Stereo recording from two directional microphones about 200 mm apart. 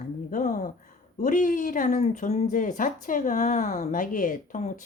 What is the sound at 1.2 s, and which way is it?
Speech, 40° left (ahead or behind).